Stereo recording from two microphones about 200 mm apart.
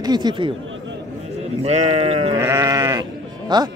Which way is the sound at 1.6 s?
30° right (ahead or behind).